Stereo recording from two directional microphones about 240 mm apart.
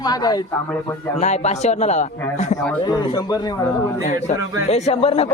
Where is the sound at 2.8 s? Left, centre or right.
Centre.